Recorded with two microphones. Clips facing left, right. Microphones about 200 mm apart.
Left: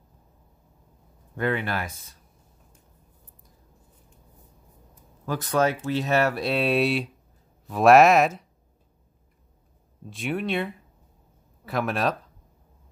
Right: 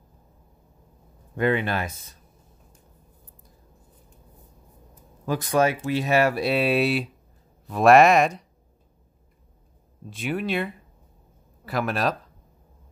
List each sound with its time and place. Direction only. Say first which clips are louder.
1.3 s speech: right 3 dB; 20° right (ahead or behind)
5.2 s speech: right 2 dB; 15° right (ahead or behind); by 8.5 s 5° left (ahead or behind)
10.0 s speech: right 1 dB; centre (ahead or behind)